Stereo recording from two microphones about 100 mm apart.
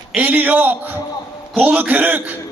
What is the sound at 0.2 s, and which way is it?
A man's voice, 15° right (ahead or behind).